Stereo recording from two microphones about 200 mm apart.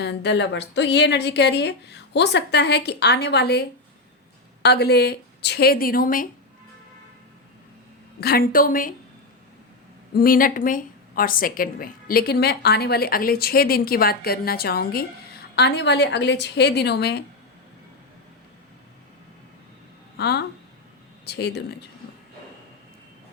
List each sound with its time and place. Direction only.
0.0 s a woman's voice: 60° left (ahead or behind)
8.2 s a woman's voice: 50° left (ahead or behind)
10.2 s a woman's voice: 45° left (ahead or behind)
20.1 s a woman's voice: 55° left (ahead or behind)